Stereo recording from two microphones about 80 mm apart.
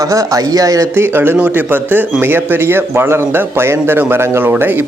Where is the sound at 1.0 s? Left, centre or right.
Right.